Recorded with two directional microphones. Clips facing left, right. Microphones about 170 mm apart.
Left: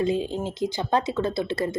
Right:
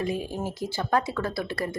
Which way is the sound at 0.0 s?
25° left (ahead or behind).